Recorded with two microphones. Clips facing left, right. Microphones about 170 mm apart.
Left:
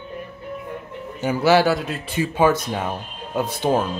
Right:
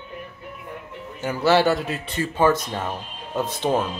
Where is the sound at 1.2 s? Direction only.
10° left (ahead or behind).